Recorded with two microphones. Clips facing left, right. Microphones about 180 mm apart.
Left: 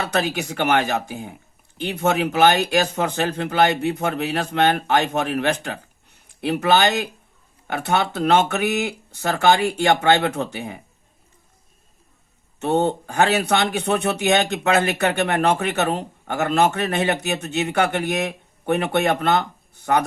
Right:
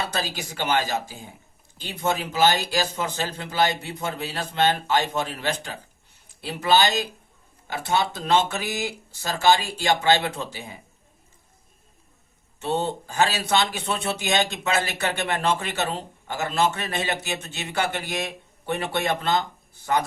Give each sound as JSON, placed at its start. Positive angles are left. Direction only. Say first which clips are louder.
{"t": 0.1, "sound": "a man's voice", "louder": "left 7 dB", "side_deg": 65}
{"t": 12.5, "sound": "a man's voice", "louder": "left 6 dB", "side_deg": 65}